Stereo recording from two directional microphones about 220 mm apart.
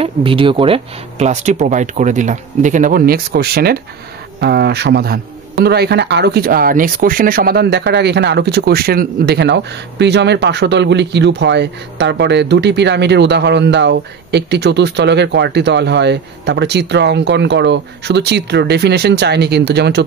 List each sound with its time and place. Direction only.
0.0 s a man's voice: 25° right (ahead or behind); by 20.1 s 50° right (ahead or behind)